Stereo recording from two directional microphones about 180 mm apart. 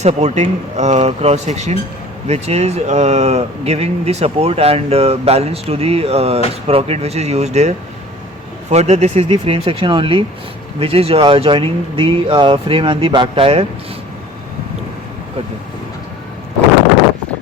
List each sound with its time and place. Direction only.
0.0 s speech: 40° right (ahead or behind)